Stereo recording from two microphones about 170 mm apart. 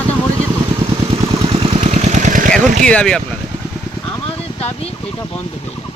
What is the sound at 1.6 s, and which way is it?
Vehicle, 40° right (ahead or behind).